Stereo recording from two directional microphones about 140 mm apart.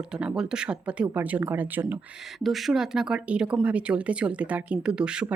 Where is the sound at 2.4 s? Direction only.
Centre (ahead or behind).